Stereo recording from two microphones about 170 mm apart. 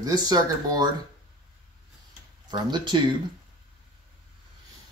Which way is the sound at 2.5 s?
25° right (ahead or behind).